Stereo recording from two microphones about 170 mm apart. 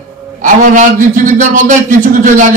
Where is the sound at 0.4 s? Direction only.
50° right (ahead or behind).